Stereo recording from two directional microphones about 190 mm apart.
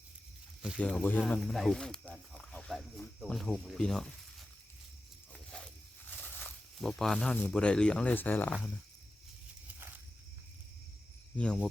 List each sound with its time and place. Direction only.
0.6 s speech: centre (ahead or behind)
5.3 s a sound: 5° left (ahead or behind)
6.1 s speech: 10° left (ahead or behind)
11.3 s cricket: 5° left (ahead or behind)